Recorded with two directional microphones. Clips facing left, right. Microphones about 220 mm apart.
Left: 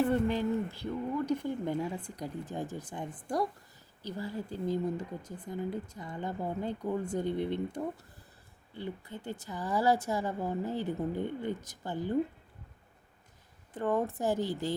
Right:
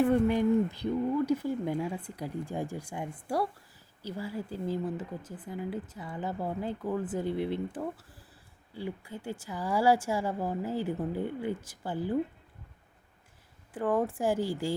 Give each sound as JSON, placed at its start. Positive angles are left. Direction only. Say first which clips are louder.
{"t": 0.0, "sound": "speech", "louder": "right 4 dB", "side_deg": -10}
{"t": 13.7, "sound": "speech", "louder": "right 2 dB", "side_deg": -5}